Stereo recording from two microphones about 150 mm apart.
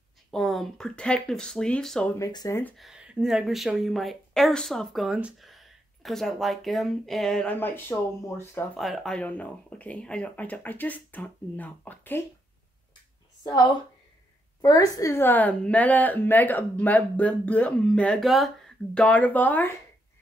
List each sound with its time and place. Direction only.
0.3 s speech: centre (ahead or behind)
2.1 s speech: 25° left (ahead or behind)
2.8 s speech: 5° right (ahead or behind)
7.5 s speech: 15° left (ahead or behind)
8.7 s speech: centre (ahead or behind)
14.6 s speech: 25° left (ahead or behind)